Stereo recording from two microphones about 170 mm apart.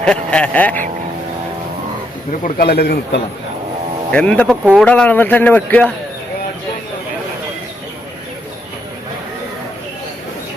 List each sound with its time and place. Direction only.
0.0 s a man's voice: 5° left (ahead or behind)
2.4 s a man's voice: 60° left (ahead or behind)
4.1 s a man's voice: 5° left (ahead or behind)
4.6 s speech: 10° right (ahead or behind)
4.9 s a man's voice: 10° left (ahead or behind)